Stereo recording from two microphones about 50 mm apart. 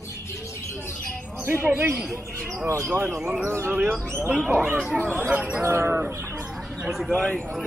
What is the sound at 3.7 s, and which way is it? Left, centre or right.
Speech, right.